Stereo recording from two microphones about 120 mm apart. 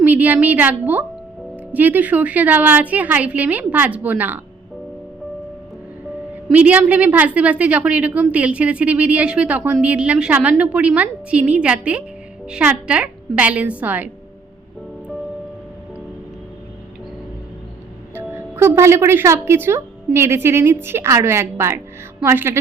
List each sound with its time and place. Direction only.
0.0 s a woman's voice: 15° right (ahead or behind)
6.5 s a woman's voice: 10° right (ahead or behind)
18.1 s a woman's voice: 20° right (ahead or behind)